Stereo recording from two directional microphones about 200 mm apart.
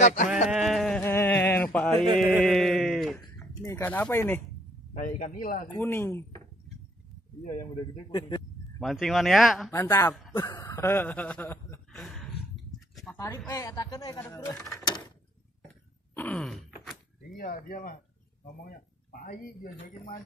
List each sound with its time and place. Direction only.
0.0 s sheep: 35° left (ahead or behind)
0.5 s music: centre (ahead or behind)
2.1 s a sound: centre (ahead or behind)
3.6 s speech: 15° left (ahead or behind)
4.9 s a man's voice: 40° left (ahead or behind)
5.7 s speech: 10° left (ahead or behind)
7.9 s speech: 20° left (ahead or behind)
8.7 s speech: centre (ahead or behind)
9.7 s speech: 15° left (ahead or behind)
10.3 s chuckle: 20° left (ahead or behind); by 12.3 s centre (ahead or behind)
12.9 s a sound: 5° left (ahead or behind)
13.5 s speech: 15° left (ahead or behind)
16.2 s groan: 5° left (ahead or behind)
17.4 s a man's voice: 45° left (ahead or behind)